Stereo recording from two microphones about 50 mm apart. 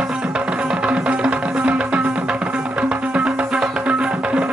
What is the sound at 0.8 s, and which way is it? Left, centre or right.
Music, right.